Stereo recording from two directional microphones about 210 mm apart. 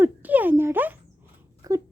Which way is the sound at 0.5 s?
10° right (ahead or behind).